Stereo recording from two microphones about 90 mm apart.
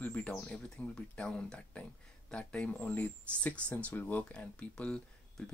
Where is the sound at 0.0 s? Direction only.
15° left (ahead or behind).